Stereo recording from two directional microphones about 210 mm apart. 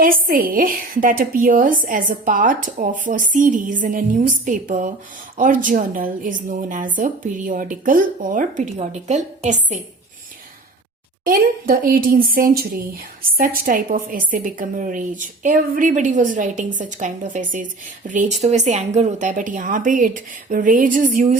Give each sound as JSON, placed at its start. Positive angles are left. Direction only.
{"t": 0.0, "sound": "a woman's voice", "side_deg": -40}
{"t": 11.2, "sound": "a woman's voice", "side_deg": -40}